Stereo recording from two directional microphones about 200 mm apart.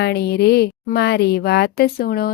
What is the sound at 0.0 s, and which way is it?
Speech, 55° left (ahead or behind).